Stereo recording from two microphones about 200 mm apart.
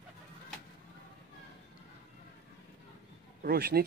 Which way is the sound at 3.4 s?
50° right (ahead or behind).